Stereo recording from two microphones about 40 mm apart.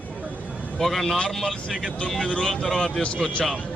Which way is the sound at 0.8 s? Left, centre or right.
Centre.